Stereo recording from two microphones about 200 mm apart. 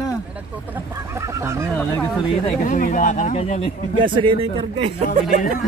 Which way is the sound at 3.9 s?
25° right (ahead or behind).